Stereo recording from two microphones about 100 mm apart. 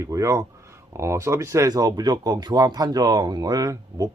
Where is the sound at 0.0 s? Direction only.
35° right (ahead or behind).